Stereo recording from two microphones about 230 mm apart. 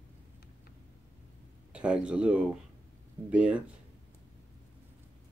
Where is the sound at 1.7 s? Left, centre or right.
Centre.